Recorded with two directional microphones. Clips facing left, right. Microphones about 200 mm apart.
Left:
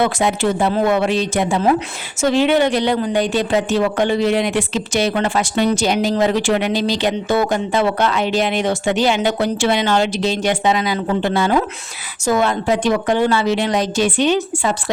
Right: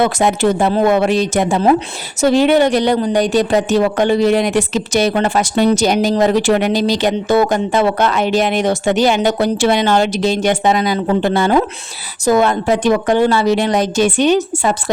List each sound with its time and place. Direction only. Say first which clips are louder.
0.0 s speech: right 3 dB; 45° right (ahead or behind)